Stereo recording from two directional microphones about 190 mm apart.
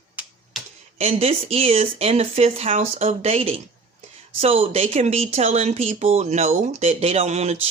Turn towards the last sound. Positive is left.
turn(degrees=-35)  # may be behind; listen again after turning